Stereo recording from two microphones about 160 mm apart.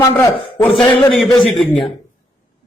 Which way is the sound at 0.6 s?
10° left (ahead or behind).